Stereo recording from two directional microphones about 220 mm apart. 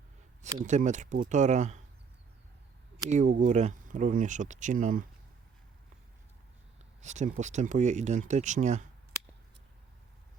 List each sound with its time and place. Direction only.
0.6 s speech: 35° right (ahead or behind)
3.1 s speech: 35° right (ahead or behind)
7.0 s speech: 30° right (ahead or behind)